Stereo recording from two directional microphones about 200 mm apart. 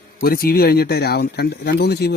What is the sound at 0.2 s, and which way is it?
Speech, 45° left (ahead or behind).